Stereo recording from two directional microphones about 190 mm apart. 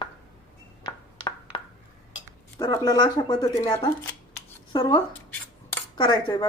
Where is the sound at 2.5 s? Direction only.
20° left (ahead or behind).